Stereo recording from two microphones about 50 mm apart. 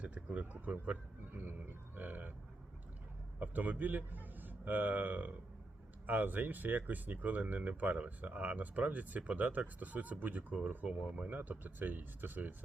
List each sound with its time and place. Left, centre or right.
0.0 s speech: right
1.4 s grunt: right
3.4 s a man's voice: right